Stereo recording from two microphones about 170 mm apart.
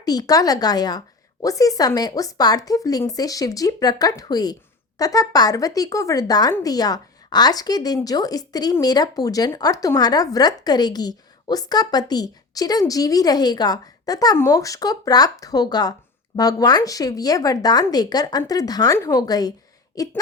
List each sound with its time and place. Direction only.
0.0 s speech: 20° left (ahead or behind)